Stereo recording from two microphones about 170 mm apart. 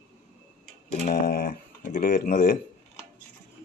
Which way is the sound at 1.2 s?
65° left (ahead or behind).